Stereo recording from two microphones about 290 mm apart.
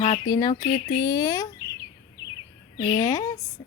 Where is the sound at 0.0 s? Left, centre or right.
Centre.